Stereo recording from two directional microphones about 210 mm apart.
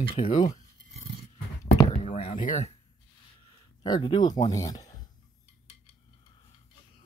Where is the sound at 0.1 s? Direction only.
30° left (ahead or behind).